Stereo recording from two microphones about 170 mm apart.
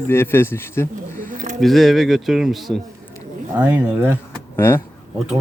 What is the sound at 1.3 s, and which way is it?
Music, 50° right (ahead or behind).